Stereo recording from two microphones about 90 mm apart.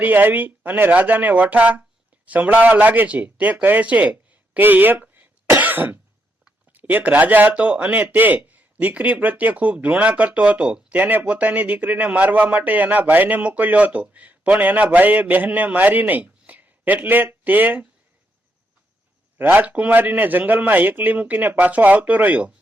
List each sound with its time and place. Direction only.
0.0 s a man's voice: 20° right (ahead or behind)
19.4 s a man's voice: 20° right (ahead or behind)